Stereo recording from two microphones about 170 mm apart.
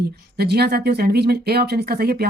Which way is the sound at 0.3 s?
70° right (ahead or behind).